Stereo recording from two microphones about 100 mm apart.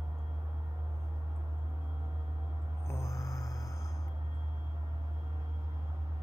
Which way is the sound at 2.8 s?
30° left (ahead or behind).